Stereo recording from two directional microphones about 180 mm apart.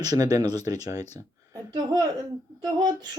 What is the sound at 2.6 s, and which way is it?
Speech, 25° right (ahead or behind).